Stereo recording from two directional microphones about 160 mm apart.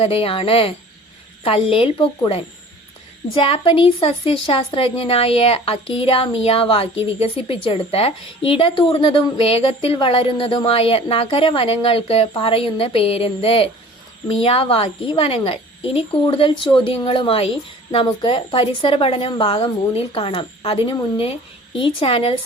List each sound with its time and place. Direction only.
0.0 s a woman's voice: 35° left (ahead or behind)